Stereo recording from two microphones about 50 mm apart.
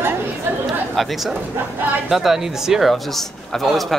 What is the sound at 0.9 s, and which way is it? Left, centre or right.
A man's voice, centre.